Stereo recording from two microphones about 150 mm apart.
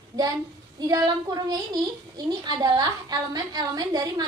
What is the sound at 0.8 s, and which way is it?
A woman's voice, 25° right (ahead or behind).